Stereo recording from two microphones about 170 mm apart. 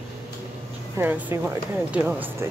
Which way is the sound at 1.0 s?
10° right (ahead or behind).